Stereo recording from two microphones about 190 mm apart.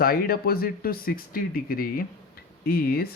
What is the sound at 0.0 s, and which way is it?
Speech, 50° left (ahead or behind).